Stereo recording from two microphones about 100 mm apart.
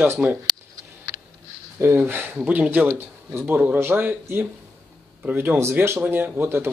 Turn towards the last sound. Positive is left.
turn(degrees=-25)  # may be behind; listen again after turning